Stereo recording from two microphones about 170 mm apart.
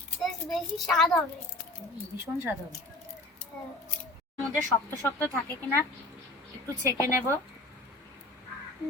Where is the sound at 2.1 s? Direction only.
10° right (ahead or behind).